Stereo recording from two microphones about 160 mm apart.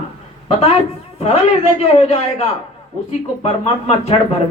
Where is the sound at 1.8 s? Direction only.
40° left (ahead or behind).